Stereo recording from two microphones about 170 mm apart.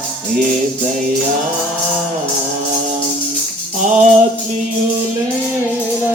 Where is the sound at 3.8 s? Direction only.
45° right (ahead or behind).